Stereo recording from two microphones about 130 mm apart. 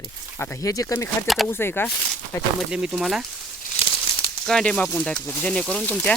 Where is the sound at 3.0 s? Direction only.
5° right (ahead or behind).